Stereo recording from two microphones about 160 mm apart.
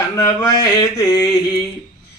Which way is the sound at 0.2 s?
20° left (ahead or behind).